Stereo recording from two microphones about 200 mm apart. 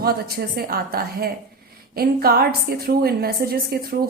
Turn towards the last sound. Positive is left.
turn(degrees=-50)  # may be behind; listen again after turning